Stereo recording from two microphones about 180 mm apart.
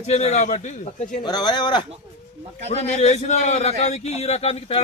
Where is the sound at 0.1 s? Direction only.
40° left (ahead or behind).